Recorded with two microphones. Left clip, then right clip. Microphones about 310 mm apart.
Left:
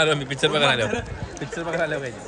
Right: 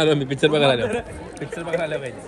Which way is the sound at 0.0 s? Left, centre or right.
Centre.